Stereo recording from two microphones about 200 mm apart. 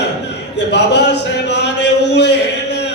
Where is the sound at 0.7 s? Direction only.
60° left (ahead or behind).